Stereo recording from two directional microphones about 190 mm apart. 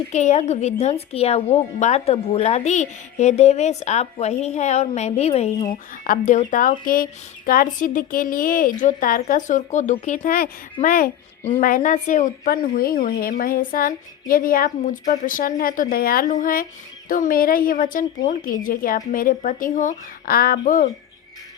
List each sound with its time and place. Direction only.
0.1 s a woman's voice: 40° left (ahead or behind)